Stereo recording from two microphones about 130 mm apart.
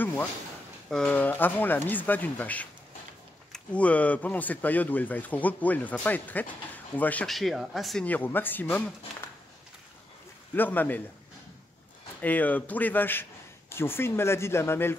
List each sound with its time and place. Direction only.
0.0 s a sound: 10° left (ahead or behind)
0.8 s speech: 5° left (ahead or behind)
7.2 s speech: centre (ahead or behind)
8.0 s speech: 15° left (ahead or behind)
10.5 s speech: 15° left (ahead or behind)
12.2 s speech: 10° left (ahead or behind)